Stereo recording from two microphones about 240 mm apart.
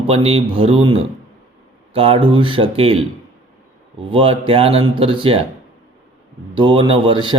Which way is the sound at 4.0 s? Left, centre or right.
Right.